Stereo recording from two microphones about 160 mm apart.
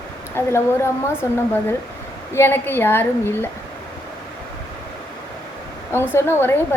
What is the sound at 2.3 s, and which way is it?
A woman's voice, 15° left (ahead or behind).